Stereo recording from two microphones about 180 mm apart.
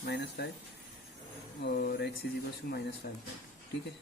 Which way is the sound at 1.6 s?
65° left (ahead or behind).